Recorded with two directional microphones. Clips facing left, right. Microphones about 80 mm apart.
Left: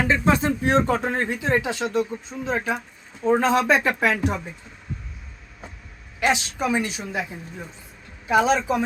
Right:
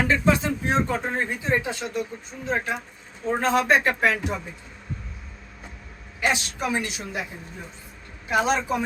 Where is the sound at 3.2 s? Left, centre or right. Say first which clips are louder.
Left 6 dB; centre.